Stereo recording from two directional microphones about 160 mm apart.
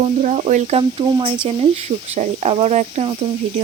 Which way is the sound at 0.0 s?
50° right (ahead or behind).